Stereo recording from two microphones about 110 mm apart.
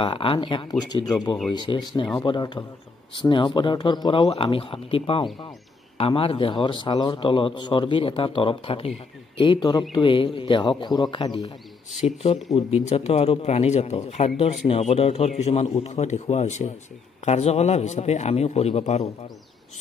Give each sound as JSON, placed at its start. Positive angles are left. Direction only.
{"t": 0.0, "sound": "a man's voice", "side_deg": 50}
{"t": 0.7, "sound": "a man's voice", "side_deg": 40}
{"t": 4.2, "sound": "a man's voice", "side_deg": 60}
{"t": 9.5, "sound": "a man's voice", "side_deg": 45}
{"t": 12.0, "sound": "a man's voice", "side_deg": 65}